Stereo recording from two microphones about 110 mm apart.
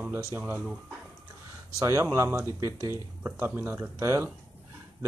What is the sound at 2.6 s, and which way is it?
Speech, 35° left (ahead or behind).